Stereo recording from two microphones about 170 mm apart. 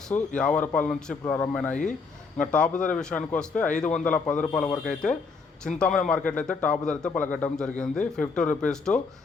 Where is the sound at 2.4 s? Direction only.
5° left (ahead or behind).